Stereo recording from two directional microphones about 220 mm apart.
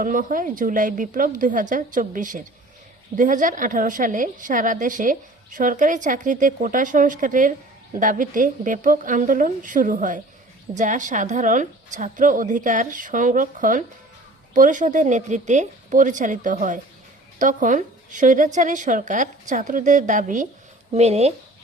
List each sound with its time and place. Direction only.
0.0 s a woman's voice: 35° right (ahead or behind)